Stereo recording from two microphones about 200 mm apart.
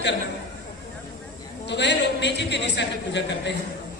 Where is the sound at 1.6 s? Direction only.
60° left (ahead or behind).